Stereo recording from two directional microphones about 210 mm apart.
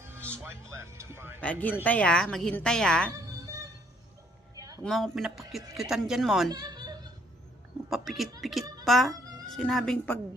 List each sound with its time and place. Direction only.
0.3 s speech: 10° right (ahead or behind)
1.4 s a woman's voice: 5° left (ahead or behind)
3.1 s music: 15° right (ahead or behind)
4.5 s a sound: 15° right (ahead or behind)
4.8 s a woman's voice: centre (ahead or behind)
6.5 s a sound: 20° right (ahead or behind)
7.9 s a woman's voice: centre (ahead or behind)